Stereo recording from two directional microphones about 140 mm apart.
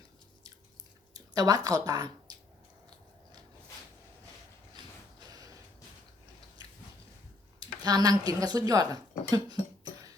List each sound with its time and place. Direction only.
1.1 s speech: 25° right (ahead or behind)
4.8 s mechanisms: 30° right (ahead or behind)
5.3 s music: 25° right (ahead or behind)
7.6 s speech: 30° right (ahead or behind)